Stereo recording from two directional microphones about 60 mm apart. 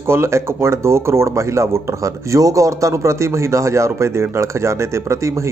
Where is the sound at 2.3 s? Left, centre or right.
Right.